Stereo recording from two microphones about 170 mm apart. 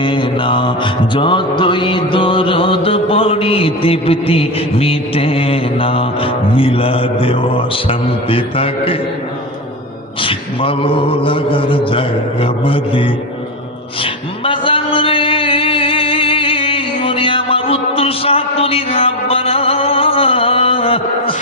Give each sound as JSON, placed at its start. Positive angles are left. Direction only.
{"t": 0.0, "sound": "music", "side_deg": 30}
{"t": 10.2, "sound": "music", "side_deg": 30}
{"t": 14.0, "sound": "a sound", "side_deg": 30}